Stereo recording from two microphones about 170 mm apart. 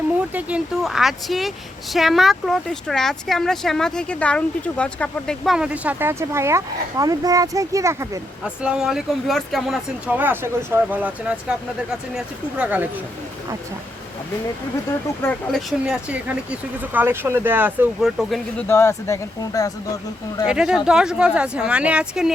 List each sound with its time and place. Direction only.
0.3 s speech: 5° right (ahead or behind)
8.4 s speech: 5° right (ahead or behind)
15.2 s speech: 10° left (ahead or behind)
15.9 s speech: 10° right (ahead or behind)
18.7 s speech: 15° left (ahead or behind)
20.5 s speech: 5° right (ahead or behind)